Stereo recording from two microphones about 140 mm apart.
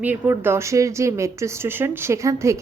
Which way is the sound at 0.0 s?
15° right (ahead or behind).